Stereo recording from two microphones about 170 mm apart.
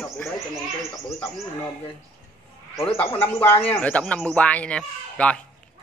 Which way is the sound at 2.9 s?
30° left (ahead or behind).